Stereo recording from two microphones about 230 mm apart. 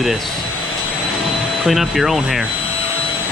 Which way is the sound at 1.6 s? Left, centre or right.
Centre.